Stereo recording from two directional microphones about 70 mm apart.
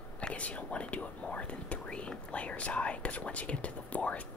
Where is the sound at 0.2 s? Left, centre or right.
Centre.